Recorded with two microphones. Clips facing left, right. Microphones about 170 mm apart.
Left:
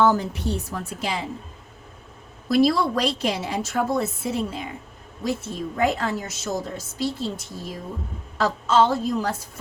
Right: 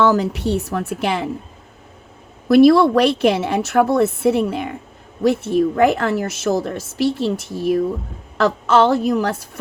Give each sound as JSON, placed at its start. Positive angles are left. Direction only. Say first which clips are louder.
{"t": 0.0, "sound": "a woman's voice", "louder": "right 4 dB", "side_deg": -90}
{"t": 2.5, "sound": "a woman's voice", "louder": "right 9 dB", "side_deg": -60}